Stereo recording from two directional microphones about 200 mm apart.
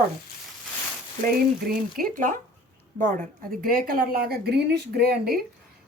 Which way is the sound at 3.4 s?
45° right (ahead or behind).